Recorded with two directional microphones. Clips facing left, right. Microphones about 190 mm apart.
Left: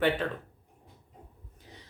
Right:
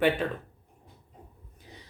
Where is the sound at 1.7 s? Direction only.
10° right (ahead or behind).